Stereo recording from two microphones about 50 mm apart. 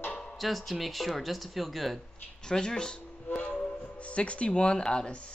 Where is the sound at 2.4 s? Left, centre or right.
Centre.